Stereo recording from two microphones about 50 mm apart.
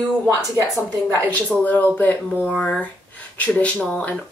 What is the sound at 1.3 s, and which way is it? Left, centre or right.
Speech, left.